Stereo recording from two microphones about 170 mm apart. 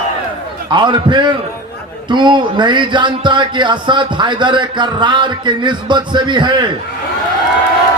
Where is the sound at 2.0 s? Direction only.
25° right (ahead or behind).